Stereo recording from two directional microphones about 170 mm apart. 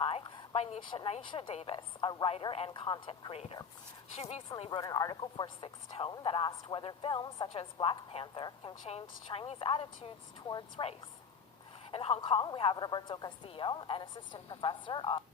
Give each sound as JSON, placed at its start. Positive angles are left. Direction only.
{"t": 0.0, "sound": "a woman's voice", "side_deg": 35}
{"t": 4.2, "sound": "a woman's voice", "side_deg": 40}
{"t": 4.8, "sound": "a woman's voice", "side_deg": 20}